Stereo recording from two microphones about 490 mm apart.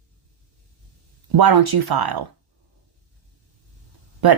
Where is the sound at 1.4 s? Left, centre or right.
Right.